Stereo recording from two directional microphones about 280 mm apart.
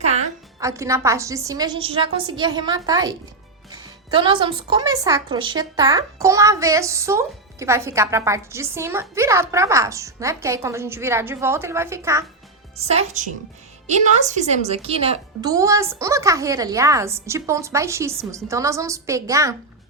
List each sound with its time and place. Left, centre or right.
0.6 s a woman's voice: centre
12.7 s a woman's voice: right